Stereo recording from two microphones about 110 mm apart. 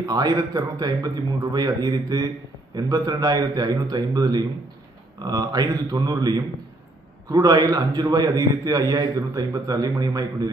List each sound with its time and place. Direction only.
0.0 s a man's voice: 35° right (ahead or behind)